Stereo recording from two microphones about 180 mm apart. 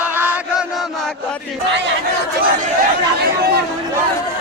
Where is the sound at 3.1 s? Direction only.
60° right (ahead or behind).